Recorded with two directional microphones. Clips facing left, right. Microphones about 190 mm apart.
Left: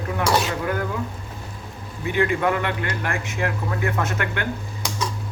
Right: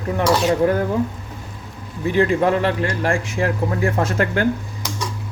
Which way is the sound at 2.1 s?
30° right (ahead or behind).